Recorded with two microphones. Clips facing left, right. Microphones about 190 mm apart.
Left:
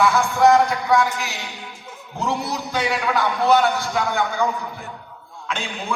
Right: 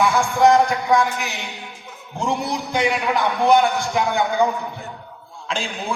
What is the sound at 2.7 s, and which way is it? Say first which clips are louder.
A man's voice: right 1 dB; 15° right (ahead or behind).